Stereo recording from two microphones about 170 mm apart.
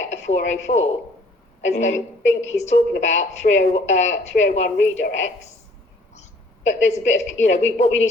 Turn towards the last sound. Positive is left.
turn(degrees=45)  # may be behind; listen again after turning